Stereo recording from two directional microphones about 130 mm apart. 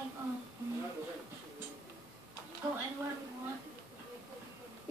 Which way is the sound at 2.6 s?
35° right (ahead or behind).